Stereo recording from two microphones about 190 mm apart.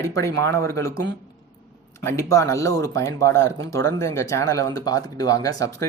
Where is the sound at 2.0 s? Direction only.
15° left (ahead or behind).